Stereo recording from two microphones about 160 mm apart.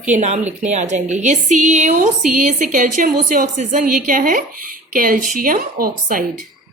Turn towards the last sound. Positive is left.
turn(degrees=-65)  # may be behind; listen again after turning